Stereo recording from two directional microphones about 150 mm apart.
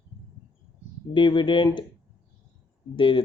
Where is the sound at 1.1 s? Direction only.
30° left (ahead or behind).